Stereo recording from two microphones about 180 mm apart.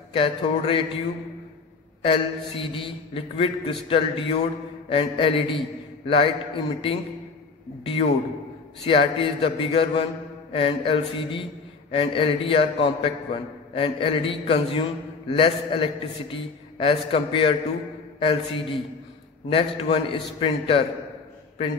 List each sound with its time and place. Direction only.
0.1 s a man's voice: 30° left (ahead or behind)
2.0 s a man's voice: 30° left (ahead or behind)